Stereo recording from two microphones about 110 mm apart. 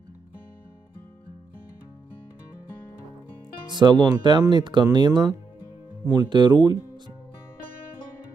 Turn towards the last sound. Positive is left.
turn(degrees=-40)  # may be behind; listen again after turning